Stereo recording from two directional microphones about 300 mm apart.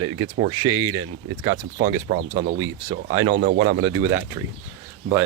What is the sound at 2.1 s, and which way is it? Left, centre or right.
Speech, right.